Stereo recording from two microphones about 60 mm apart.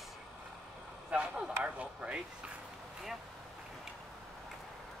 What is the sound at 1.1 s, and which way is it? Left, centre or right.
Speech, centre.